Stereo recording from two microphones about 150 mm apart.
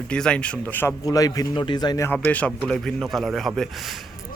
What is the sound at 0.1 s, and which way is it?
A man's voice, 5° left (ahead or behind).